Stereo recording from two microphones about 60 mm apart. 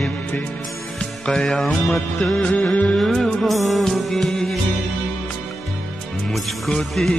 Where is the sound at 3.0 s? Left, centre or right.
Centre.